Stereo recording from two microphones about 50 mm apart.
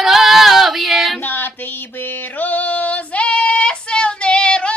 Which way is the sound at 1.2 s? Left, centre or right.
Left.